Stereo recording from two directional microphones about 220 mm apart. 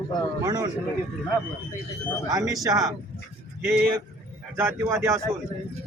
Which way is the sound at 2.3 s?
15° right (ahead or behind).